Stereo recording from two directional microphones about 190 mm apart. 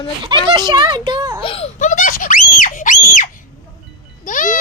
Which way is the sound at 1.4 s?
35° left (ahead or behind).